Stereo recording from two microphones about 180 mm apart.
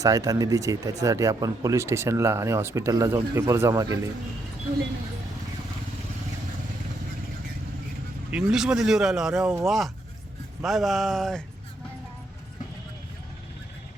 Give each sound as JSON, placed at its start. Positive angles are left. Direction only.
{"t": 0.0, "sound": "speech", "side_deg": -20}
{"t": 8.3, "sound": "speech", "side_deg": -5}